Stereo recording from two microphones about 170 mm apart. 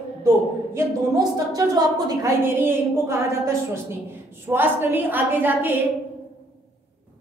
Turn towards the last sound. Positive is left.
turn(degrees=-10)  # may be behind; listen again after turning